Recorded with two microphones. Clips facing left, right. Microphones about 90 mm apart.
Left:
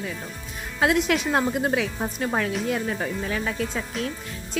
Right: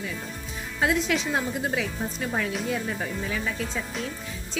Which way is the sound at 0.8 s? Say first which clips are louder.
Left 3 dB; 60° left (ahead or behind).